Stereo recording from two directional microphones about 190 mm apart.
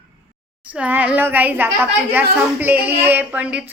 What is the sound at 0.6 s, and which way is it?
A woman's voice, 5° right (ahead or behind).